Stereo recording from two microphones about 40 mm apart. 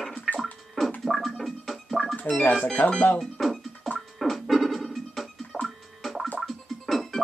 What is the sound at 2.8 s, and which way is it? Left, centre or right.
Speech, left.